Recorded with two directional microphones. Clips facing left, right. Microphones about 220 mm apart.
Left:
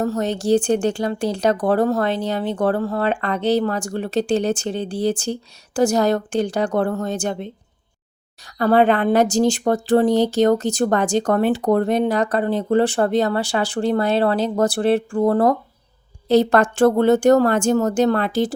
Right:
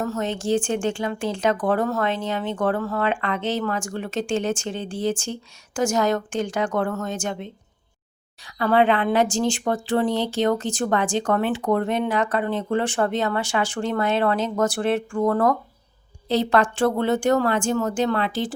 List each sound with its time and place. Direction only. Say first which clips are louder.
0.0 s speech: left 4 dB; 35° left (ahead or behind)
16.3 s speech: left 5 dB; 45° left (ahead or behind)